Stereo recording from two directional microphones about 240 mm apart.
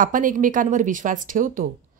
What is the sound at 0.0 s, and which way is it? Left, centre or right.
Speech, right.